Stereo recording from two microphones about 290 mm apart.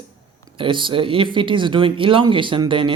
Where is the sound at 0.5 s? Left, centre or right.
Centre.